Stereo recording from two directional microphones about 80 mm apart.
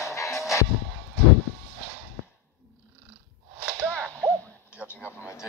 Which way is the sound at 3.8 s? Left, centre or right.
Right.